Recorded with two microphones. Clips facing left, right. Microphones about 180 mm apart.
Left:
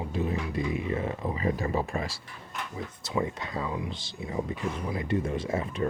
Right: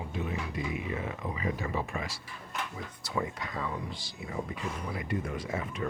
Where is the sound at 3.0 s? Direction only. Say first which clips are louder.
Left 4 dB; 25° left (ahead or behind).